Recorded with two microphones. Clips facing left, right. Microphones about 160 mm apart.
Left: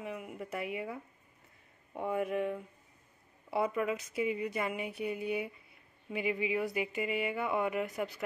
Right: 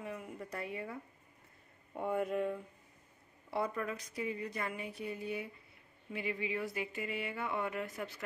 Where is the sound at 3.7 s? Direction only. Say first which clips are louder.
Left 6 dB; 15° left (ahead or behind).